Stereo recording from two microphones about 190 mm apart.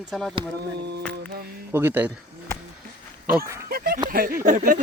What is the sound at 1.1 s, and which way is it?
Music, 55° right (ahead or behind).